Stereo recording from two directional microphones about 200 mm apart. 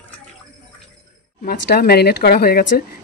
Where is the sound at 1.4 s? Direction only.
50° left (ahead or behind).